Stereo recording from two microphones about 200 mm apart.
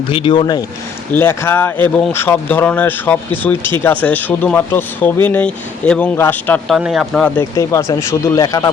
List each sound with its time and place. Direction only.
0.1 s speech: 25° left (ahead or behind)
1.1 s speech: 10° left (ahead or behind)
6.7 s speech: centre (ahead or behind); by 8.7 s 15° left (ahead or behind)